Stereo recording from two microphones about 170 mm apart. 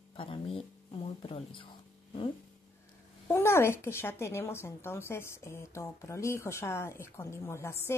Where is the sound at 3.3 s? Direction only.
15° left (ahead or behind).